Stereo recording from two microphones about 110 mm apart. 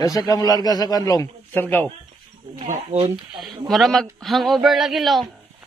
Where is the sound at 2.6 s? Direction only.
90° right.